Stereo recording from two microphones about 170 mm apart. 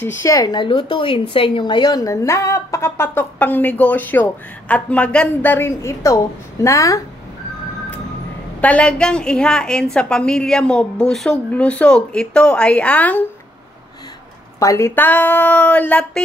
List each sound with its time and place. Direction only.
0.2 s a woman's voice: 20° left (ahead or behind)
8.5 s a woman's voice: 10° left (ahead or behind)
14.6 s a woman's voice: 15° left (ahead or behind)